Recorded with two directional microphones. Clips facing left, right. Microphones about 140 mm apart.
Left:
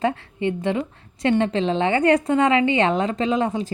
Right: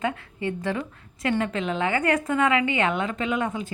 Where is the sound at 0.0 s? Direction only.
30° left (ahead or behind).